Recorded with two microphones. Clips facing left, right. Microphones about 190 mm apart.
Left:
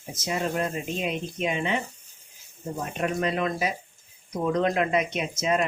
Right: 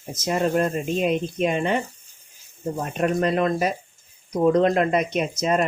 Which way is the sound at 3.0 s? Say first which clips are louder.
Right 6 dB; 40° right (ahead or behind).